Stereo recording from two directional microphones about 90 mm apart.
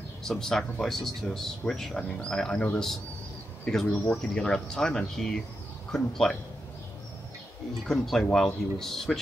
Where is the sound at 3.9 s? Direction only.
20° left (ahead or behind).